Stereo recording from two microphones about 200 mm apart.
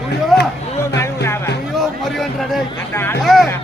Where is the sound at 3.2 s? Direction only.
Centre (ahead or behind).